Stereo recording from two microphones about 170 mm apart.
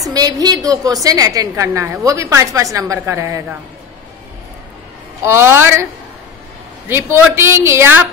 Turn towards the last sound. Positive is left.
turn(degrees=-15)  # may be behind; listen again after turning